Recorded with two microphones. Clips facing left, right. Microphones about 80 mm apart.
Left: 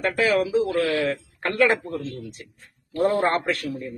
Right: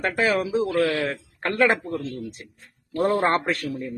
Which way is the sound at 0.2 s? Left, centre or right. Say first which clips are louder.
Left 2 dB; right.